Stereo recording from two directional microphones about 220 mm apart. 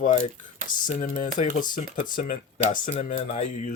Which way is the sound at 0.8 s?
35° left (ahead or behind).